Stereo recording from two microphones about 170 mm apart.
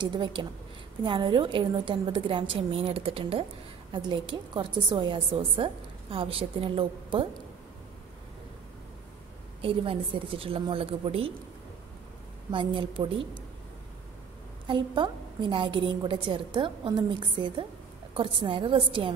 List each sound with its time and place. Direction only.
0.0 s a woman's voice: 25° right (ahead or behind)
9.6 s a woman's voice: 35° right (ahead or behind)
12.4 s a woman's voice: 30° right (ahead or behind)
14.7 s a woman's voice: 30° right (ahead or behind)